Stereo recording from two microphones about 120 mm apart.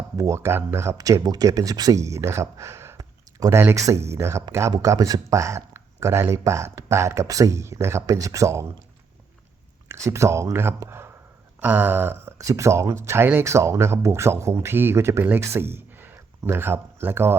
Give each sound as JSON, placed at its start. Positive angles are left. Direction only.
{"t": 0.2, "sound": "speech", "side_deg": -25}
{"t": 9.9, "sound": "speech", "side_deg": -25}
{"t": 11.6, "sound": "a sound", "side_deg": -15}
{"t": 12.4, "sound": "speech", "side_deg": -25}